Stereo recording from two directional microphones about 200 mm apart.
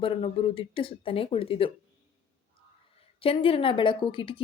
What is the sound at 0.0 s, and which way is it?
Speech, 25° left (ahead or behind).